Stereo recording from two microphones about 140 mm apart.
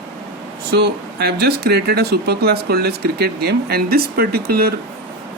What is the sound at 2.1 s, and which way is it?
Speech, 90° right.